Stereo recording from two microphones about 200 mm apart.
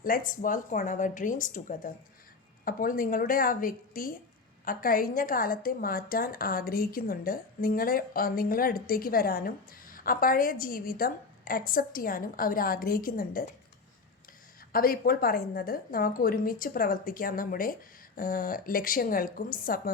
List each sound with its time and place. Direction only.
0.0 s a woman's voice: 45° left (ahead or behind)
14.7 s a woman's voice: 45° left (ahead or behind)